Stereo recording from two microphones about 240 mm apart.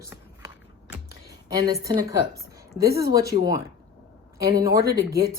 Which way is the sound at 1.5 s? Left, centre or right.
Centre.